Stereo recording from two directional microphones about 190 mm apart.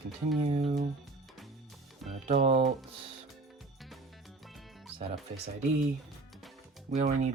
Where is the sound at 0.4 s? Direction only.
30° right (ahead or behind).